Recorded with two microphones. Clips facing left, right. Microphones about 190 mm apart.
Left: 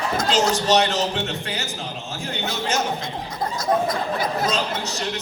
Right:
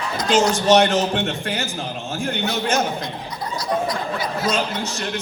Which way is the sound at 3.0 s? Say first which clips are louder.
Left 1 dB; 50° left (ahead or behind).